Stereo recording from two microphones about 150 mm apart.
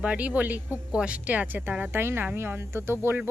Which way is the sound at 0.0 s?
10° right (ahead or behind).